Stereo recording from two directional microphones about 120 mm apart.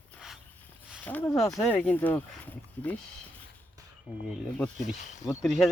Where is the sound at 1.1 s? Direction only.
15° left (ahead or behind).